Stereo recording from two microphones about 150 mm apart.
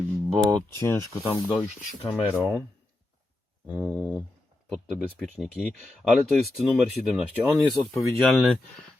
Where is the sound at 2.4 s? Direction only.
10° right (ahead or behind).